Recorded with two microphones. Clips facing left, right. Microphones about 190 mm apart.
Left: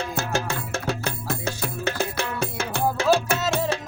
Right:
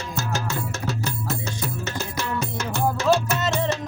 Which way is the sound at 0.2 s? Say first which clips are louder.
Right 1 dB; 55° left (ahead or behind).